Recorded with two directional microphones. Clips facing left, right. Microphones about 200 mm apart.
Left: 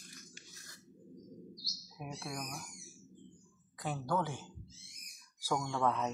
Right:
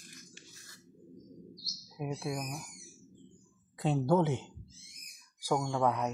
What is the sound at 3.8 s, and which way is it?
Speech, 25° right (ahead or behind).